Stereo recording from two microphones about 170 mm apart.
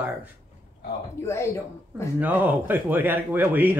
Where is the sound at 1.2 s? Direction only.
15° left (ahead or behind).